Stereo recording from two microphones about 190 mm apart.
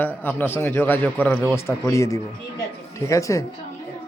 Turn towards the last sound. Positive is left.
turn(degrees=15)  # may be behind; listen again after turning